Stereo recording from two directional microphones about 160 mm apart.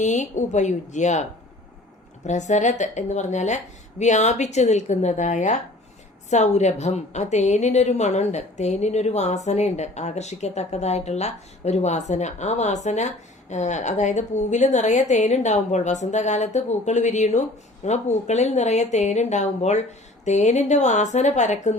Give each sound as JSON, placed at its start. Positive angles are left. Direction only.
{"t": 0.0, "sound": "a woman's voice", "side_deg": 50}
{"t": 2.2, "sound": "a woman's voice", "side_deg": 45}